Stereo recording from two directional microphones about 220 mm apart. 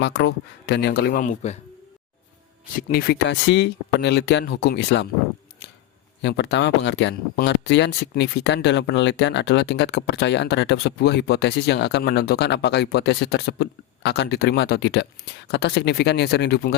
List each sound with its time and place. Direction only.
0.0 s speech: 55° left (ahead or behind); by 1.5 s 35° left (ahead or behind)
2.7 s speech: 45° left (ahead or behind)
6.2 s speech: 50° left (ahead or behind)